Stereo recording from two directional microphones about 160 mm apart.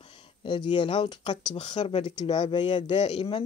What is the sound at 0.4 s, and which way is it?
Speech, 30° left (ahead or behind).